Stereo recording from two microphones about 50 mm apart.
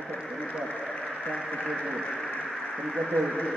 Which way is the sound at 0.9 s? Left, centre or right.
Centre.